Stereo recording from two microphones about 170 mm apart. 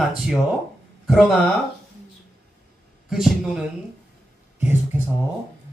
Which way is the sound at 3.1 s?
Centre (ahead or behind).